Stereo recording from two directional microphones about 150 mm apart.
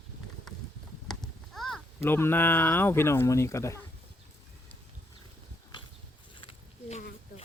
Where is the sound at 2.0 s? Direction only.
15° left (ahead or behind).